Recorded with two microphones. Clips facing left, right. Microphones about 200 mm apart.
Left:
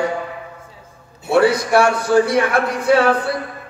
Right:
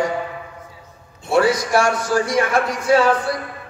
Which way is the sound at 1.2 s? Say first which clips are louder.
Left 2 dB; 60° left (ahead or behind).